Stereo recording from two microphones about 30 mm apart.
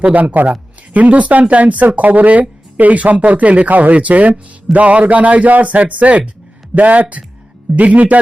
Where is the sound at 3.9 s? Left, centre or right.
Right.